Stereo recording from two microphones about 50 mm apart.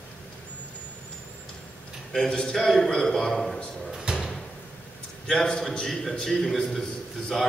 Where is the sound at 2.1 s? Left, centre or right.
Centre.